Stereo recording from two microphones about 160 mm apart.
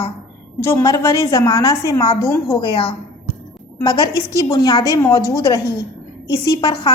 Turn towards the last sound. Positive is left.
turn(degrees=30)  # may be behind; listen again after turning